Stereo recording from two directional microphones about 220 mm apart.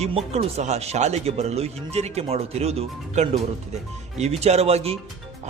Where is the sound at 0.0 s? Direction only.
30° right (ahead or behind).